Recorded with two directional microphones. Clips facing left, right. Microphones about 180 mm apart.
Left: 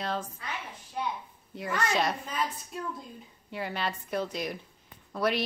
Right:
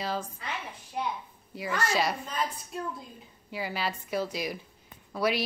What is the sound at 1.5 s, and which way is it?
Speech, centre (ahead or behind).